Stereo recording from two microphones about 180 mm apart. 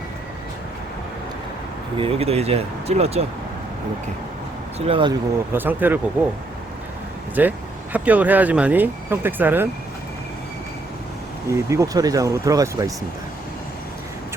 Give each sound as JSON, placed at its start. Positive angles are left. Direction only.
{"t": 2.0, "sound": "speech", "side_deg": -35}
{"t": 4.9, "sound": "speech", "side_deg": -30}
{"t": 5.5, "sound": "speech", "side_deg": -10}
{"t": 7.4, "sound": "speech", "side_deg": -10}
{"t": 11.4, "sound": "speech", "side_deg": -15}